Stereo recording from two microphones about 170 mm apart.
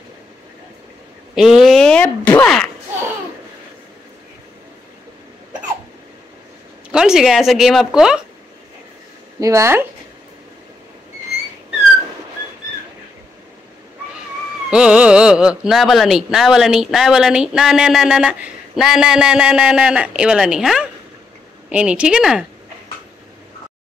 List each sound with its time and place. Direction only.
1.3 s speech: centre (ahead or behind)
6.9 s speech: 5° right (ahead or behind)
9.4 s speech: 15° right (ahead or behind)
14.7 s speech: 5° right (ahead or behind)